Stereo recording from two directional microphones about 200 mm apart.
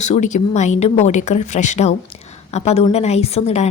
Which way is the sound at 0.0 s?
35° left (ahead or behind).